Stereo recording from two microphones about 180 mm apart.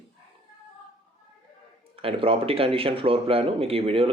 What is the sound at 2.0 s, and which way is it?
Speech, 30° right (ahead or behind).